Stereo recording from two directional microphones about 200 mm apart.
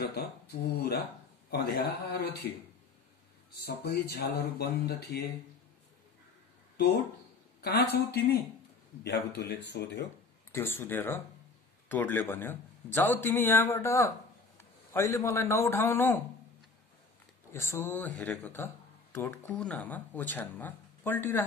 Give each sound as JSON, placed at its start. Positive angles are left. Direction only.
{"t": 0.0, "sound": "speech", "side_deg": 50}
{"t": 3.6, "sound": "speech", "side_deg": 50}
{"t": 7.6, "sound": "speech", "side_deg": 50}
{"t": 10.5, "sound": "speech", "side_deg": 10}
{"t": 14.6, "sound": "a sound", "side_deg": 15}
{"t": 15.1, "sound": "speech", "side_deg": 15}
{"t": 17.5, "sound": "speech", "side_deg": 15}